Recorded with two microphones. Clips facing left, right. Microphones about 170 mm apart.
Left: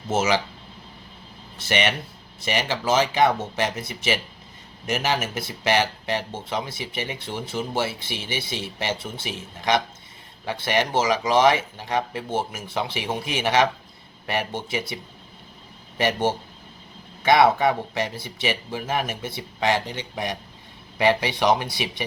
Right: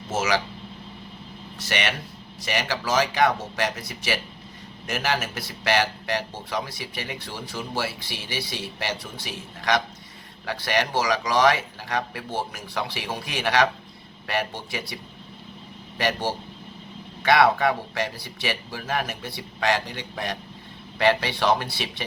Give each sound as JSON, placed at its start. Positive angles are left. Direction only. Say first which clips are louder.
{"t": 0.1, "sound": "speech", "louder": "left 3 dB", "side_deg": 25}
{"t": 1.5, "sound": "speech", "louder": "left 4 dB", "side_deg": 25}
{"t": 16.0, "sound": "speech", "louder": "left 3 dB", "side_deg": 20}